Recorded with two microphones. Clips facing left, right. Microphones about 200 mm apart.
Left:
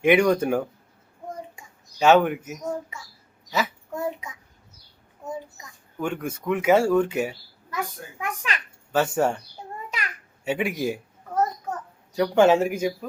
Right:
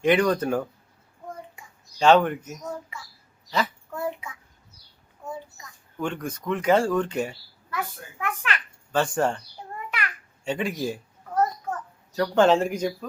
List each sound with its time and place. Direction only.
0.0 s a child's voice: 10° left (ahead or behind)
2.0 s a child's voice: 5° left (ahead or behind)
3.5 s a sound: 5° left (ahead or behind)
5.2 s a child's voice: 20° left (ahead or behind)
6.0 s a child's voice: 10° left (ahead or behind)
10.4 s a child's voice: 10° left (ahead or behind)
12.1 s a child's voice: 10° left (ahead or behind)